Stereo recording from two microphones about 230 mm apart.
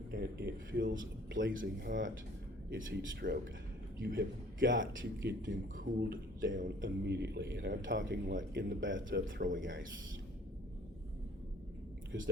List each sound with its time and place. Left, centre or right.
0.1 s a man's voice: right
5.7 s a man's voice: right
8.3 s speech: right
8.8 s speech: right
9.1 s speech: right
9.6 s a man's voice: right